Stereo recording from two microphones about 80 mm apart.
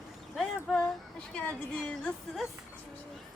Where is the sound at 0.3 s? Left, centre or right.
Centre.